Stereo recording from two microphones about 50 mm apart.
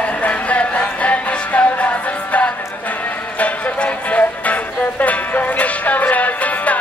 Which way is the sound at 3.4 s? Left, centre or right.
Left.